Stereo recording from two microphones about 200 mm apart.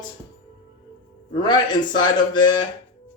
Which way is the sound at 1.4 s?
20° left (ahead or behind).